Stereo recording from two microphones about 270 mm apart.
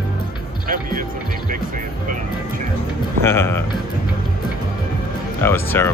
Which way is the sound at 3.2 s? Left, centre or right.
Centre.